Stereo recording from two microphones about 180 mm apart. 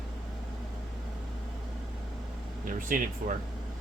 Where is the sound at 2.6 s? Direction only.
50° right (ahead or behind).